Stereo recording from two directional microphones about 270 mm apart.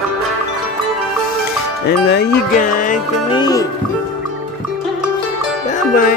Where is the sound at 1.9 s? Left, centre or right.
Left.